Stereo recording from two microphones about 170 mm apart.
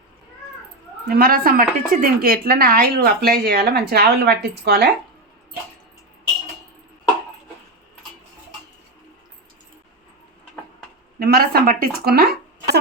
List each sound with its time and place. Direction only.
1.0 s a woman's voice: 60° right (ahead or behind); by 4.9 s 75° right (ahead or behind)
11.2 s a woman's voice: 65° right (ahead or behind)